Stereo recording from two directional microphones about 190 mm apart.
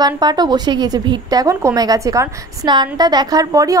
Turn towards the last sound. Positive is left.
turn(degrees=-15)  # may be behind; listen again after turning